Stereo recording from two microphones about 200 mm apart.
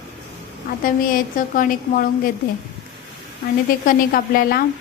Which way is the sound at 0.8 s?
45° left (ahead or behind).